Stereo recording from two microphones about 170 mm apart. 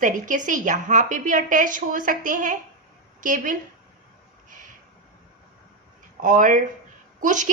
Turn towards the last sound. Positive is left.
turn(degrees=-50)  # may be behind; listen again after turning